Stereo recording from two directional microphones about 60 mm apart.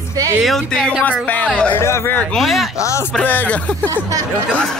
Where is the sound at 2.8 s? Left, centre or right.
Left.